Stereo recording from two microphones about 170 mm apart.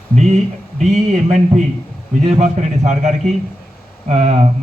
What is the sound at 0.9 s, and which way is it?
A man's voice, 45° right (ahead or behind).